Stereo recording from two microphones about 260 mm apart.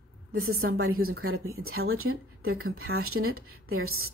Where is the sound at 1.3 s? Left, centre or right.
Right.